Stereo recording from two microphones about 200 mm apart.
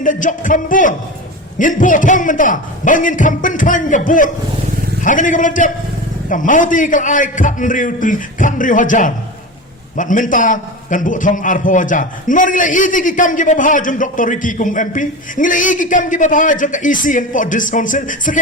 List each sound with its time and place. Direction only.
0.0 s a man's voice: 40° left (ahead or behind)